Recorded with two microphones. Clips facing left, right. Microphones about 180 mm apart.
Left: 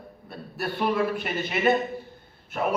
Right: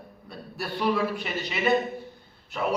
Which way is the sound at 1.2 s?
50° left (ahead or behind).